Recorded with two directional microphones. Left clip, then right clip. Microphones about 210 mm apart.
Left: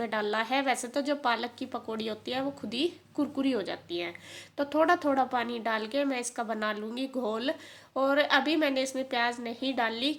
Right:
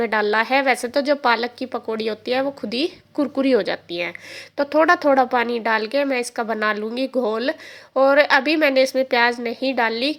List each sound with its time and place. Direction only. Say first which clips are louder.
0.0 s a woman's voice: right 11 dB; 30° right (ahead or behind)